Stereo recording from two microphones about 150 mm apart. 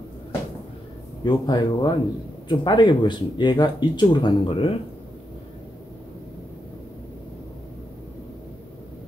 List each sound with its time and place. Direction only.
1.2 s speech: 30° left (ahead or behind)